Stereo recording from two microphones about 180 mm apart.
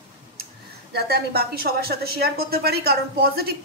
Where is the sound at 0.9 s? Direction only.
60° right (ahead or behind).